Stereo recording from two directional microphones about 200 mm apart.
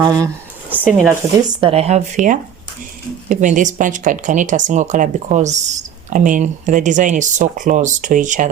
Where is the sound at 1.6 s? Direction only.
30° right (ahead or behind).